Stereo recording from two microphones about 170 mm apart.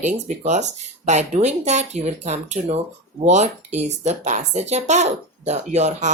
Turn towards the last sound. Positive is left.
turn(degrees=-45)  # may be behind; listen again after turning